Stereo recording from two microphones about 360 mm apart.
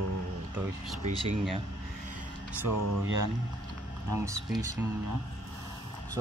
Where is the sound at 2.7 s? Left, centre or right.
Right.